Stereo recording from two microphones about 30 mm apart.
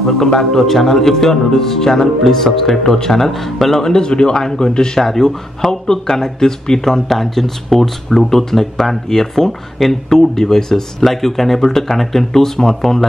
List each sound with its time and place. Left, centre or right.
0.0 s a man's voice: centre
3.8 s a man's voice: left; by 9.9 s centre
10.0 s speech: centre